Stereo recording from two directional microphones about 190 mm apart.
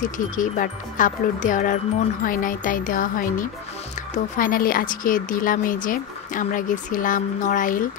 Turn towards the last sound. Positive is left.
turn(degrees=45)  # may be behind; listen again after turning